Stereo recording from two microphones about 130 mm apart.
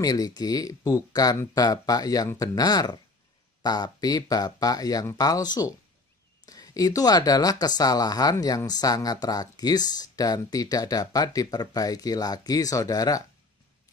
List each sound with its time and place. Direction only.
0.0 s speech: 30° left (ahead or behind)